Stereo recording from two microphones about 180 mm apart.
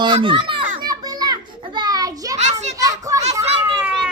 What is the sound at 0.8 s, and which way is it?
Children playing, 20° right (ahead or behind).